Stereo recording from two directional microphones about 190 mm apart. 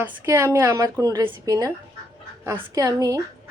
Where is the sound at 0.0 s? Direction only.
15° right (ahead or behind).